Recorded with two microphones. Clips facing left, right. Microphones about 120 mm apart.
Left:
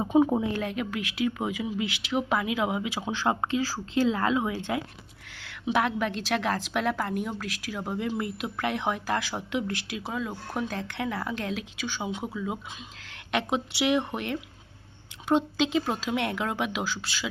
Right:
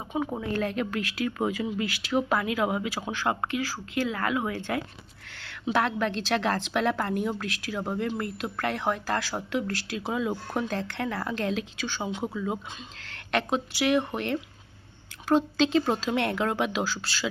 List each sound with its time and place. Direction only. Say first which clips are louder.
0.0 s a woman's voice: left 8 dB; 25° left (ahead or behind)
10.1 s a woman's voice: right 5 dB; 5° right (ahead or behind)
13.1 s speech: right 1 dB; 15° left (ahead or behind)